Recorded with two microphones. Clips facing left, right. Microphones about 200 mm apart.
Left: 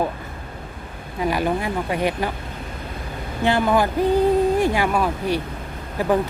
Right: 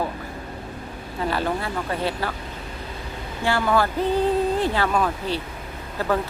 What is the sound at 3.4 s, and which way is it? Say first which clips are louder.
Speech: left 3 dB; 20° left (ahead or behind).